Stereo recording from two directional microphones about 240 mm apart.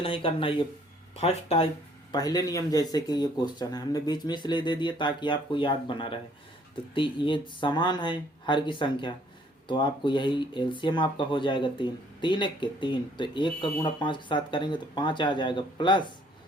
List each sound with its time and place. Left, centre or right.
0.0 s speech: left